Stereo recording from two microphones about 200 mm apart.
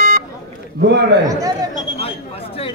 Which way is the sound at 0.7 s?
60° right (ahead or behind).